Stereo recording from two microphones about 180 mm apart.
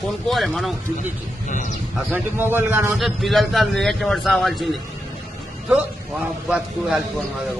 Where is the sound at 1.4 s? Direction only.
45° left (ahead or behind).